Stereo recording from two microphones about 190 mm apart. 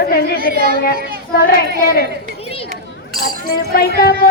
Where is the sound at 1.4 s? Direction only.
55° left (ahead or behind).